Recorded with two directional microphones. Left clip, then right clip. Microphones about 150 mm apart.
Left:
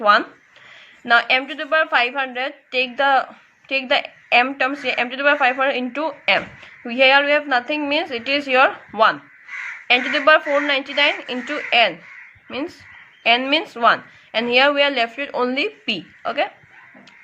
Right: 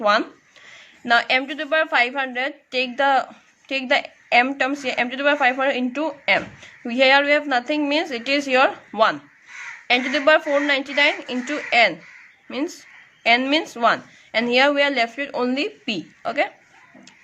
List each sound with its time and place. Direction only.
0.0 s a woman's voice: 40° right (ahead or behind)